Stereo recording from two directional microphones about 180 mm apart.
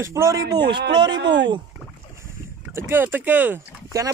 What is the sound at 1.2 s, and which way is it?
Speech, 75° right (ahead or behind).